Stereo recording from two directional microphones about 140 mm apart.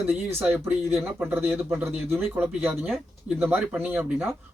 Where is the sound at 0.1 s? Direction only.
15° right (ahead or behind).